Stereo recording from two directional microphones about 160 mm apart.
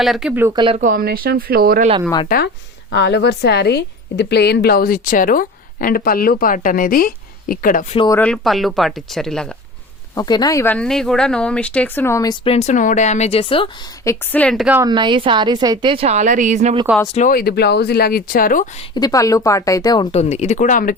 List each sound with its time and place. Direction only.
0.0 s speech: centre (ahead or behind)
0.5 s a woman's voice: 30° right (ahead or behind)
0.8 s speech: 60° right (ahead or behind)
2.3 s a woman's voice: 55° left (ahead or behind)
2.9 s a woman's voice: 90° left; by 7.9 s 55° left (ahead or behind)
8.1 s speech: 5° left (ahead or behind)
10.2 s speech: 25° left (ahead or behind)
10.8 s speech: 5° left (ahead or behind); by 12.4 s 20° left (ahead or behind)
12.5 s speech: 45° left (ahead or behind)
14.0 s speech: 15° left (ahead or behind)
14.8 s a woman's voice: 25° right (ahead or behind); by 16.7 s 45° right (ahead or behind)
17.2 s speech: 60° left (ahead or behind)
18.9 s speech: 20° left (ahead or behind)
20.1 s speech: 40° left (ahead or behind)